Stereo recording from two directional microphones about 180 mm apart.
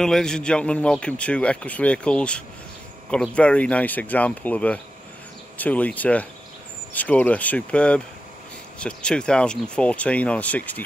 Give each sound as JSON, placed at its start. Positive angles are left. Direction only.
{"t": 0.0, "sound": "a man's voice", "side_deg": 5}